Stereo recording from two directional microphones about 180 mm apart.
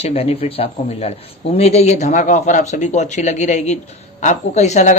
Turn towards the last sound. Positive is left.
turn(degrees=40)  # may be behind; listen again after turning